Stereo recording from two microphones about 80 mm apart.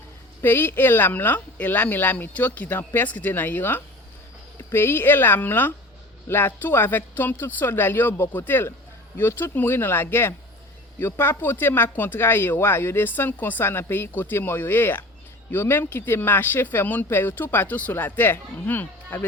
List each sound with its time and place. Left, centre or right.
0.4 s speech: left